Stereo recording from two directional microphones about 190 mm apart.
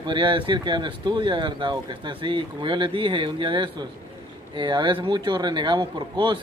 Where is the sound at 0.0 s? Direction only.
25° right (ahead or behind).